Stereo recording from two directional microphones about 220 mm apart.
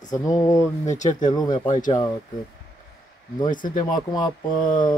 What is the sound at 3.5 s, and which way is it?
Speech, 40° left (ahead or behind).